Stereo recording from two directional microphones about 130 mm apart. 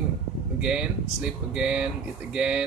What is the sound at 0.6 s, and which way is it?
Speech, 5° right (ahead or behind).